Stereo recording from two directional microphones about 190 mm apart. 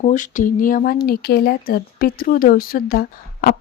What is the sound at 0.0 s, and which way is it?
Speech, 40° left (ahead or behind).